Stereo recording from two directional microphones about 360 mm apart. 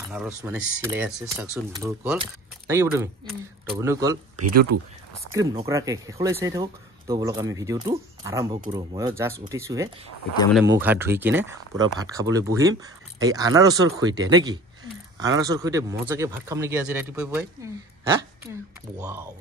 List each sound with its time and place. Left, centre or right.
0.1 s speech: centre
4.7 s speech: right
5.3 s speech: centre